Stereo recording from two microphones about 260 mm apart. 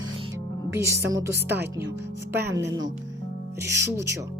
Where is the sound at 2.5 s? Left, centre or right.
Right.